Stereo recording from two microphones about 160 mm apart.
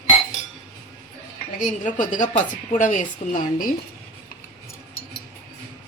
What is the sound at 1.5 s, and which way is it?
A woman's voice, 55° left (ahead or behind).